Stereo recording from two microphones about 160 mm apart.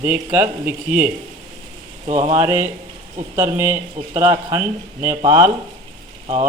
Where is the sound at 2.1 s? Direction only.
50° right (ahead or behind).